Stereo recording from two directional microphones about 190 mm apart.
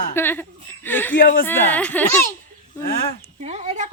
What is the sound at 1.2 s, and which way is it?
Speech, 50° left (ahead or behind).